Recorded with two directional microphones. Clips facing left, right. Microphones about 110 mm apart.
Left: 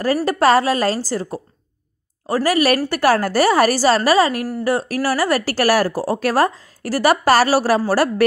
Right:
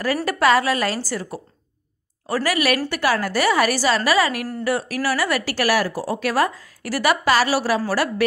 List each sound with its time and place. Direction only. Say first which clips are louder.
0.0 s speech: left 3 dB; 30° left (ahead or behind)
2.9 s speech: left 5 dB; 45° left (ahead or behind)